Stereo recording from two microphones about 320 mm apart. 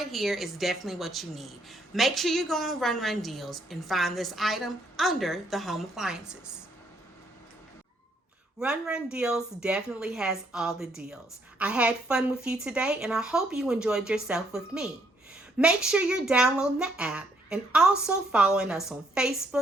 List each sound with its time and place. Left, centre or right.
0.0 s speech: centre
8.5 s speech: centre